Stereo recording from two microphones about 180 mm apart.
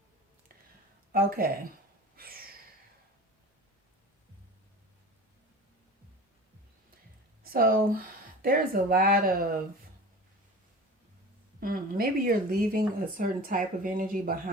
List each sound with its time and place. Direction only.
1.1 s speech: 55° right (ahead or behind)
2.1 s a sound: 55° right (ahead or behind)
7.5 s speech: 55° right (ahead or behind)
11.6 s speech: 55° right (ahead or behind)